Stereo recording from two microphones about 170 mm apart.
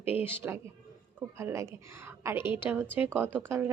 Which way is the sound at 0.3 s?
15° right (ahead or behind).